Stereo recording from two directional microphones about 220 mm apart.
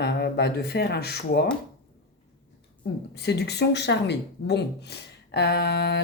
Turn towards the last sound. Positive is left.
turn(degrees=50)  # may be behind; listen again after turning